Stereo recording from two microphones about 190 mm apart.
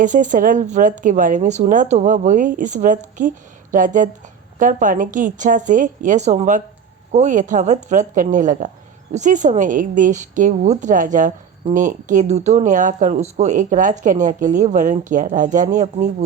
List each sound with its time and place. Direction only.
0.0 s a woman's voice: 40° right (ahead or behind)